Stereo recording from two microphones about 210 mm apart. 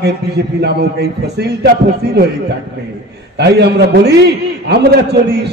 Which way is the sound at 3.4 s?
50° right (ahead or behind).